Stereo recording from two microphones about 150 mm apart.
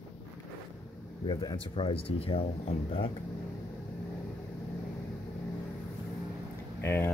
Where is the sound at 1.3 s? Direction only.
35° left (ahead or behind).